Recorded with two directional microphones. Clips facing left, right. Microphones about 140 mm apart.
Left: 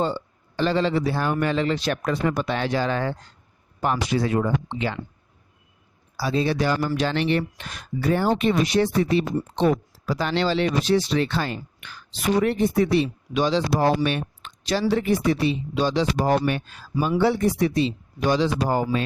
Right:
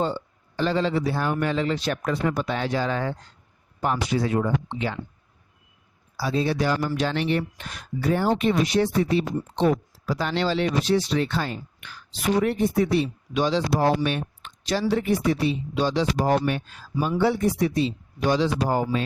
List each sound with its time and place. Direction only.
0.0 s a man's voice: 80° left
3.8 s a man's voice: 85° left
6.1 s speech: 90° left